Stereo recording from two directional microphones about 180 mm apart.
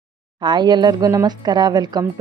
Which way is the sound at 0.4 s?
25° right (ahead or behind).